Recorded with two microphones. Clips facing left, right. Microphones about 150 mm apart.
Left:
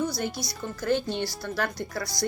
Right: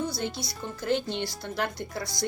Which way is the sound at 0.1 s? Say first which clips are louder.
Left 1 dB; 25° right (ahead or behind).